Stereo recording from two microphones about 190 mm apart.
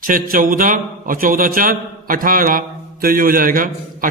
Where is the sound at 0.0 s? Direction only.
45° right (ahead or behind).